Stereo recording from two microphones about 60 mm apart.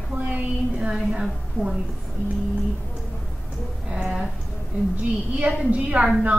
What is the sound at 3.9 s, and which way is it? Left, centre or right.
Speech, centre.